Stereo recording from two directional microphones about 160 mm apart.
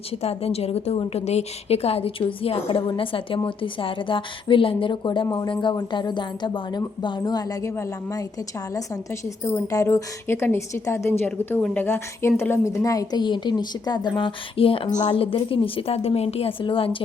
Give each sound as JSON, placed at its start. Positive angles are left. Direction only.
{"t": 0.2, "sound": "a woman's voice", "side_deg": 40}
{"t": 9.5, "sound": "a woman's voice", "side_deg": 20}